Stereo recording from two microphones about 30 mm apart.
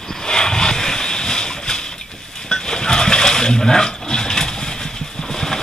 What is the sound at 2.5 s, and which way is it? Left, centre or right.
Water, left.